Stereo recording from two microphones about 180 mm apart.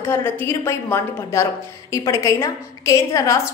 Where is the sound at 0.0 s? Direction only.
15° left (ahead or behind).